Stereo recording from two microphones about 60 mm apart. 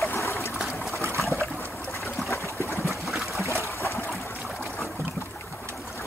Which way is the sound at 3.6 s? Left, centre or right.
Left.